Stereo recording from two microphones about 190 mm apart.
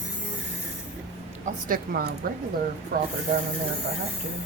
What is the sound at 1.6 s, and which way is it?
A woman's voice, 50° right (ahead or behind).